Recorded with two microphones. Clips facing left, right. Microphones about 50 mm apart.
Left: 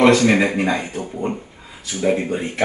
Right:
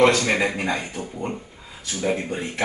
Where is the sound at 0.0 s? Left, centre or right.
Left.